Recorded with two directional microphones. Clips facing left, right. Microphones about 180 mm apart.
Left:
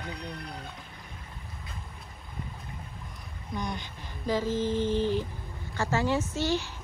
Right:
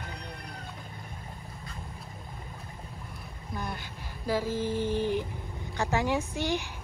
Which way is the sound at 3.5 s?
5° right (ahead or behind).